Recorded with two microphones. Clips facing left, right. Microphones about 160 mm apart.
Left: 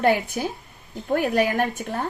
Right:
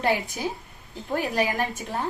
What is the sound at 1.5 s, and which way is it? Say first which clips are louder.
Speech: left 4 dB; 45° left (ahead or behind).